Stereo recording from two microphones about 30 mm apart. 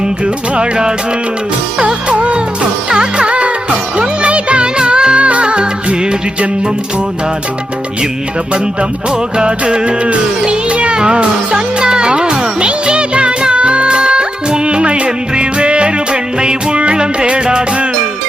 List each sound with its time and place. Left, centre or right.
0.5 s music: right
2.9 s music: right
3.2 s music: right
4.8 s music: right
9.4 s music: right